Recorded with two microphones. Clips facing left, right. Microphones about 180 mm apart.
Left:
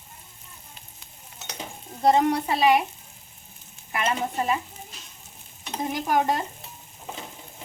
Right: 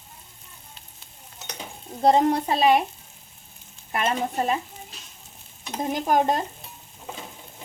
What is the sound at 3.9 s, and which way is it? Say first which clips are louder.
Speech: right 1 dB; 35° right (ahead or behind).